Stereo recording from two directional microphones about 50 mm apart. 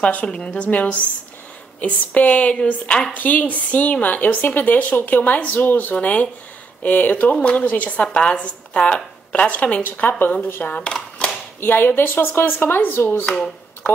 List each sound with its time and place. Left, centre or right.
0.0 s a woman's voice: left
2.5 s speech: centre
3.1 s a woman's voice: left
5.9 s a woman's voice: left
8.0 s a woman's voice: left
9.8 s a woman's voice: left
10.6 s speech: left
11.6 s speech: left
13.3 s speech: centre